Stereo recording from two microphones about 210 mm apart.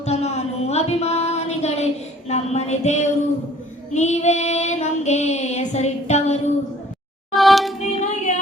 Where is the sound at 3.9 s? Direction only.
35° left (ahead or behind).